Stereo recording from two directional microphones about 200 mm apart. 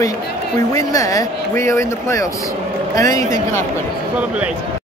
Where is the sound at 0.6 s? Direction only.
15° left (ahead or behind).